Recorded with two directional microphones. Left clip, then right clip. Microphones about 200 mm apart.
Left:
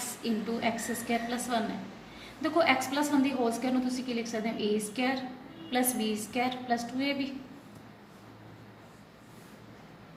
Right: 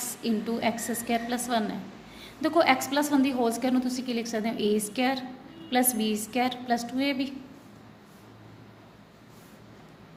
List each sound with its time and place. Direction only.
0.0 s a woman's voice: 45° right (ahead or behind)